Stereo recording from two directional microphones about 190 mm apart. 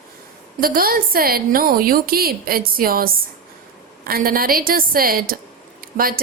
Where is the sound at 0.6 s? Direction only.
50° right (ahead or behind).